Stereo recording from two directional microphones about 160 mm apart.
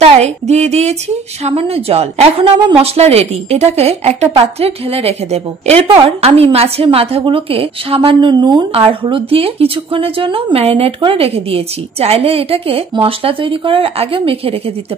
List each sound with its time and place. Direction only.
0.0 s a woman's voice: 45° right (ahead or behind)